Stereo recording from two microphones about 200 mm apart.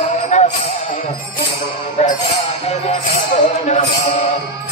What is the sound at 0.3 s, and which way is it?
Music, 35° left (ahead or behind).